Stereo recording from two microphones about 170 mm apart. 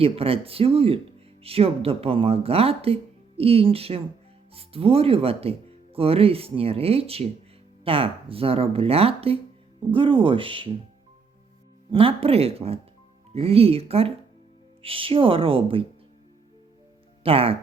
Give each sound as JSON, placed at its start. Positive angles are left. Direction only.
{"t": 0.0, "sound": "speech", "side_deg": -35}
{"t": 11.9, "sound": "speech", "side_deg": -35}
{"t": 17.2, "sound": "speech", "side_deg": -35}